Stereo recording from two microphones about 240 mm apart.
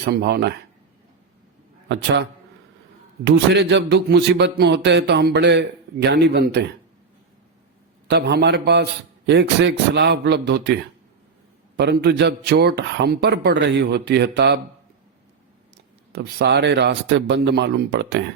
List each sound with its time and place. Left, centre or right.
0.0 s a man's voice: right
3.2 s a man's voice: right
8.1 s a man's voice: right
11.8 s a man's voice: right
16.1 s a man's voice: right